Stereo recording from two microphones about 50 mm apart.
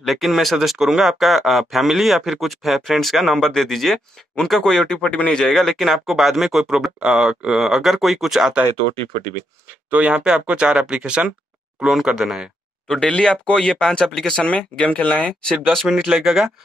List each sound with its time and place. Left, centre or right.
0.0 s speech: centre
4.9 s speech: left
5.4 s speech: centre
7.1 s speech: centre
7.6 s speech: centre
9.8 s speech: right
12.8 s speech: centre
14.4 s speech: left
15.6 s speech: centre
16.0 s speech: centre